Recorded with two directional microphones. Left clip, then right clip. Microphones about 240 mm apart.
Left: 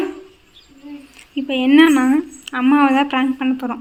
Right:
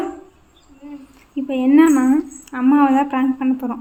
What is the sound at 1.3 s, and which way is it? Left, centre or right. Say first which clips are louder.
A woman's voice: left 1 dB; centre.